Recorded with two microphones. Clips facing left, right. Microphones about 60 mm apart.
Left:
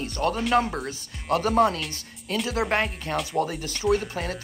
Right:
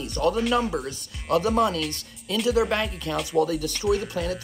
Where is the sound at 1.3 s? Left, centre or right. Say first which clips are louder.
Even; left.